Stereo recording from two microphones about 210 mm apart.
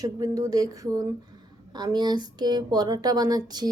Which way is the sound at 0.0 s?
15° right (ahead or behind).